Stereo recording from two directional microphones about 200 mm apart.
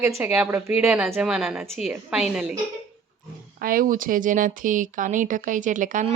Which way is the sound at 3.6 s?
45° right (ahead or behind).